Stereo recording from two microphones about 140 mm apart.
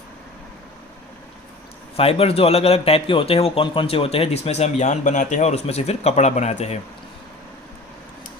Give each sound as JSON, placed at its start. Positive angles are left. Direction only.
{"t": 2.0, "sound": "speech", "side_deg": 45}